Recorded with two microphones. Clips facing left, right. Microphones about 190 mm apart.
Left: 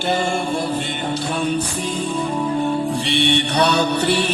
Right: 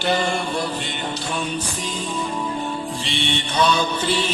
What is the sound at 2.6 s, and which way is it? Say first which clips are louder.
Music: left 7 dB; 60° left (ahead or behind).